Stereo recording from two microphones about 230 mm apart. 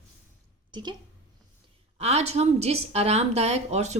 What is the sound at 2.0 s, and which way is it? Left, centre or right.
A woman's voice, right.